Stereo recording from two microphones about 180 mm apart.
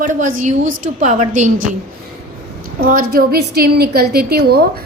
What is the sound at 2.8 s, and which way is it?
A woman's voice, 55° right (ahead or behind).